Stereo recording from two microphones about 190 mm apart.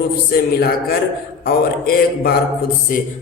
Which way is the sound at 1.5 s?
50° left (ahead or behind).